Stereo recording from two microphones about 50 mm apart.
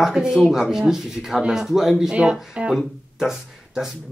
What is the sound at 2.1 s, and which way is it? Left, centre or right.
Speech, right.